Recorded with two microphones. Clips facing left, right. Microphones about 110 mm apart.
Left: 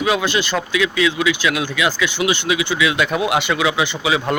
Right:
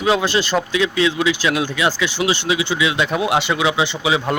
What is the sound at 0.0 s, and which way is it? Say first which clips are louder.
A man's voice: right 1 dB; 30° right (ahead or behind).